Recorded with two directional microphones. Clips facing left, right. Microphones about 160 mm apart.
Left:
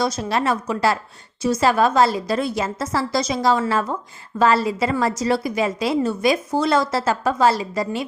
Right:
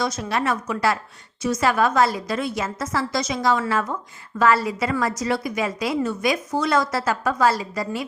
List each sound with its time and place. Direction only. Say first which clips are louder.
0.0 s a woman's voice: left 3 dB; 30° left (ahead or behind)